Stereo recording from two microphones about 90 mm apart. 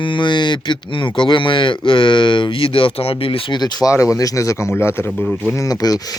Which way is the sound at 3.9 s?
35° left (ahead or behind).